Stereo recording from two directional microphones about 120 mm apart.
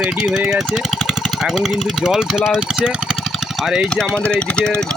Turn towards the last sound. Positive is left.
turn(degrees=10)  # may be behind; listen again after turning